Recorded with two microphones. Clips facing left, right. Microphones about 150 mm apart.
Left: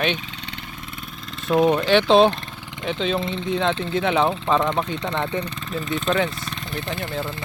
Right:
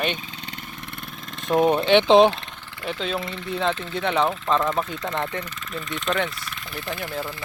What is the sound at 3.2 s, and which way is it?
Speech, 25° left (ahead or behind).